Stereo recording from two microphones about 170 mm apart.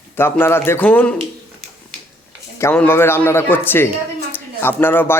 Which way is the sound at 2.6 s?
15° left (ahead or behind).